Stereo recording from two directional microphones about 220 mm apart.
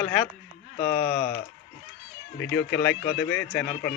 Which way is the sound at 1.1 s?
45° left (ahead or behind).